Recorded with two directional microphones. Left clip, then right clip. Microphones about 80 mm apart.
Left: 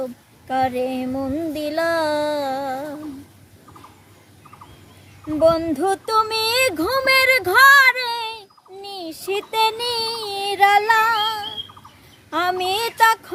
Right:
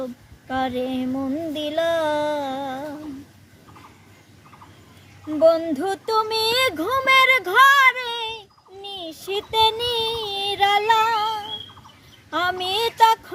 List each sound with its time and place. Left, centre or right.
0.4 s speech: left
1.1 s music: left
1.8 s a sound: left
5.3 s speech: left
6.7 s child singing: left
12.3 s speech: left